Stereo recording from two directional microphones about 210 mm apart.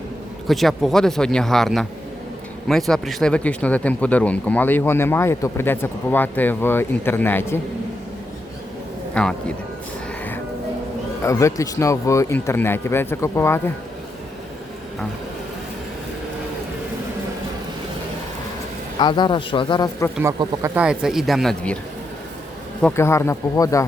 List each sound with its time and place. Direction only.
0.4 s speech: centre (ahead or behind)
9.2 s speech: 5° left (ahead or behind)
11.2 s speech: 15° left (ahead or behind)
18.9 s a man's voice: 20° left (ahead or behind)
20.4 s speech: 15° right (ahead or behind); by 21.8 s 5° left (ahead or behind)
22.8 s speech: 10° left (ahead or behind)